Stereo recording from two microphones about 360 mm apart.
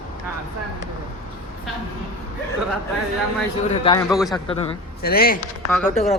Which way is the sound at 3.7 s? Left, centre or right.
Centre.